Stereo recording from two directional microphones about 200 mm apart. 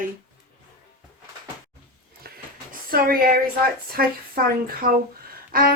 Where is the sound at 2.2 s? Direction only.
50° right (ahead or behind).